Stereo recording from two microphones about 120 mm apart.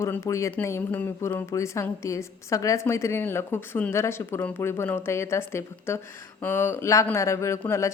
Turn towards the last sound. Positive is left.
turn(degrees=25)  # may be behind; listen again after turning